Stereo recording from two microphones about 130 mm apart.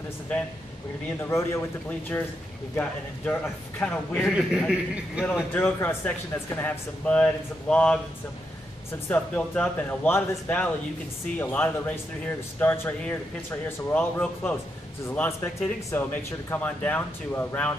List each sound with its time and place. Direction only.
1.2 s speech: 20° left (ahead or behind)
4.3 s a man's voice: 5° right (ahead or behind)
5.5 s speech: 15° left (ahead or behind)
9.1 s speech: 15° left (ahead or behind)